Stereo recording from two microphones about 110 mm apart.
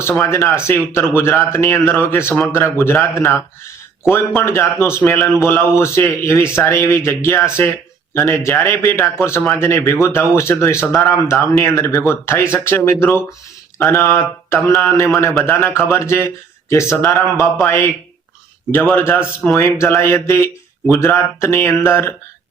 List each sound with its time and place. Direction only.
0.2 s a man's voice: 25° left (ahead or behind)